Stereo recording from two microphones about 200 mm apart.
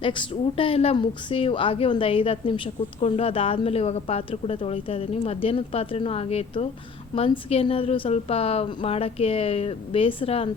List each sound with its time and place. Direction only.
0.0 s speech: 25° left (ahead or behind)